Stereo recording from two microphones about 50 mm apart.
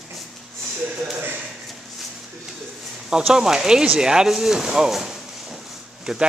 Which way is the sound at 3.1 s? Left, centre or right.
Centre.